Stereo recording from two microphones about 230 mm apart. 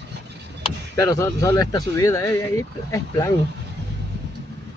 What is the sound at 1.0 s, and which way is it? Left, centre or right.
Speech, centre.